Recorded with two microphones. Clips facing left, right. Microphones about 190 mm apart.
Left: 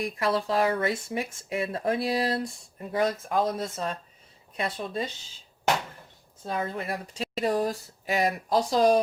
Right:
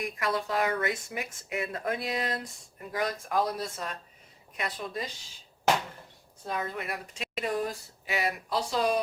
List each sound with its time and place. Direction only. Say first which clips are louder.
0.0 s speech: left 4 dB; 30° left (ahead or behind)
6.4 s speech: left 3 dB; 30° left (ahead or behind)